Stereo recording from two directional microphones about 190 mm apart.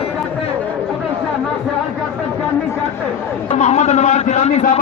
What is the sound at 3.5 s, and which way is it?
A man's voice, 35° left (ahead or behind).